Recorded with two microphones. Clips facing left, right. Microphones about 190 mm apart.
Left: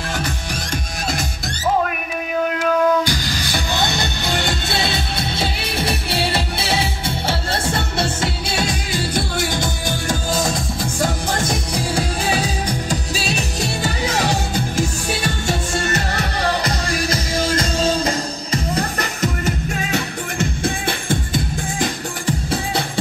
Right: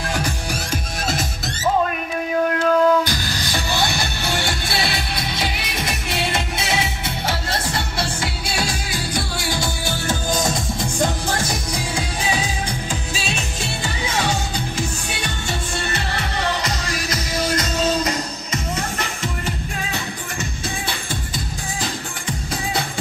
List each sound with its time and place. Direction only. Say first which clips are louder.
0.7 s music: left 1 dB; centre (ahead or behind)
3.1 s music: left 2 dB; 15° left (ahead or behind)
10.3 s music: left 1 dB; centre (ahead or behind)
13.1 s music: left 4 dB; 40° left (ahead or behind)
17.1 s music: even; 30° left (ahead or behind)
20.6 s music: left 6 dB; 55° left (ahead or behind)